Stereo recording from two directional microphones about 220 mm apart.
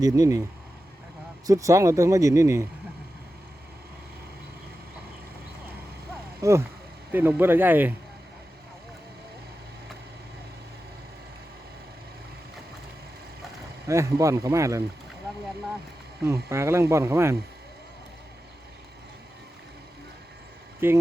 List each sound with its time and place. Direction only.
0.0 s speech: 15° right (ahead or behind)
1.5 s speech: 15° right (ahead or behind)
6.4 s speech: 15° right (ahead or behind)
13.8 s speech: 15° right (ahead or behind)
16.5 s speech: 10° right (ahead or behind)
20.8 s speech: 10° right (ahead or behind)